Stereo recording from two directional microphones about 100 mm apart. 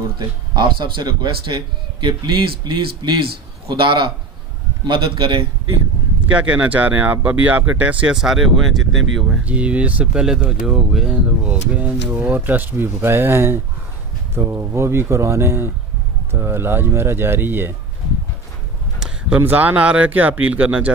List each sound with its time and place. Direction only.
0.6 s a man's voice: 50° right (ahead or behind)
6.3 s speech: 15° right (ahead or behind)
9.4 s speech: 15° right (ahead or behind)
18.9 s speech: 10° right (ahead or behind)